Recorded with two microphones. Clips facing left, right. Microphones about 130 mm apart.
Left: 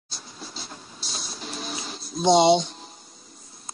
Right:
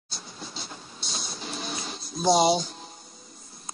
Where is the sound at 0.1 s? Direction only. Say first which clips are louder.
Even; centre (ahead or behind).